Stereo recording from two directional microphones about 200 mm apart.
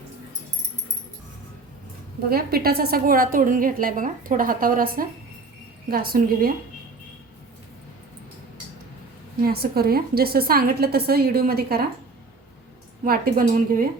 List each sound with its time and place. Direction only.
2.3 s a woman's voice: 50° right (ahead or behind)
9.4 s a woman's voice: 50° right (ahead or behind)
13.1 s a woman's voice: 45° right (ahead or behind)